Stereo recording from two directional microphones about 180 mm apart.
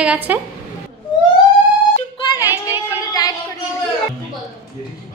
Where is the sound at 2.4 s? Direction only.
10° right (ahead or behind).